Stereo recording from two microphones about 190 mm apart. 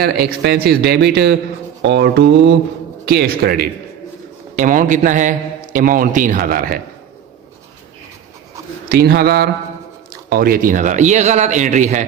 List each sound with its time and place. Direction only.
0.0 s a man's voice: 55° right (ahead or behind)
3.1 s a man's voice: 55° right (ahead or behind)
4.5 s a man's voice: 45° right (ahead or behind)
8.9 s a man's voice: 55° right (ahead or behind); by 12.0 s 40° right (ahead or behind)